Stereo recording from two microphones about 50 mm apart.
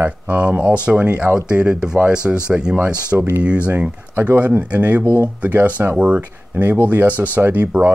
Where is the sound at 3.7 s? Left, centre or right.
Right.